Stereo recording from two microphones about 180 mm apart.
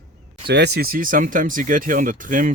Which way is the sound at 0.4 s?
70° right (ahead or behind).